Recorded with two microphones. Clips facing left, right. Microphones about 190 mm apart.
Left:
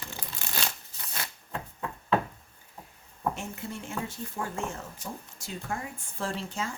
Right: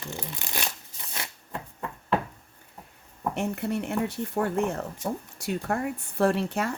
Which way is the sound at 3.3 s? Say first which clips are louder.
Right 10 dB; 65° right (ahead or behind).